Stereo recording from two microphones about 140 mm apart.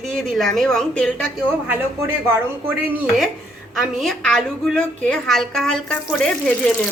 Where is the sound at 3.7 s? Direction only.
Centre (ahead or behind).